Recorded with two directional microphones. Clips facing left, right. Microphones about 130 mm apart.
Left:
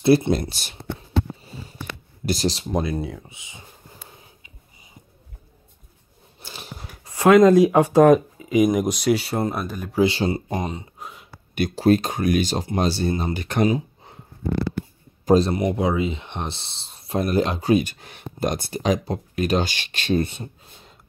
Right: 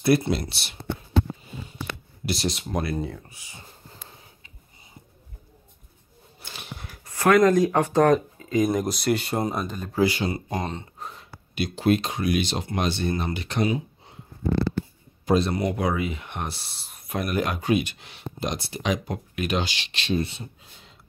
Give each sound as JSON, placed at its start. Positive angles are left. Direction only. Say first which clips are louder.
{"t": 0.0, "sound": "speech", "louder": "left 4 dB", "side_deg": 25}
{"t": 0.3, "sound": "speech", "louder": "left 4 dB", "side_deg": 40}
{"t": 2.2, "sound": "speech", "louder": "left 4 dB", "side_deg": 40}
{"t": 2.7, "sound": "speech", "louder": "left 3 dB", "side_deg": 15}
{"t": 6.4, "sound": "a sound", "louder": "left 2 dB", "side_deg": 35}
{"t": 7.1, "sound": "speech", "louder": "left 5 dB", "side_deg": 20}
{"t": 10.0, "sound": "speech", "louder": "left 2 dB", "side_deg": 25}
{"t": 10.6, "sound": "a sound", "louder": "left 2 dB", "side_deg": 10}
{"t": 11.7, "sound": "speech", "louder": "left 4 dB", "side_deg": 40}
{"t": 13.3, "sound": "speech", "louder": "left 4 dB", "side_deg": 45}
{"t": 15.2, "sound": "speech", "louder": "left 5 dB", "side_deg": 35}
{"t": 15.5, "sound": "speech", "louder": "left 3 dB", "side_deg": 20}